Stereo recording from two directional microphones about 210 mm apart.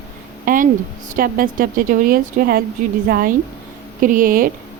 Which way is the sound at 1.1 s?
40° right (ahead or behind).